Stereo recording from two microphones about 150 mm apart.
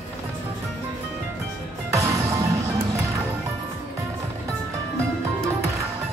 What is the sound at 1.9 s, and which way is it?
Music, 20° right (ahead or behind).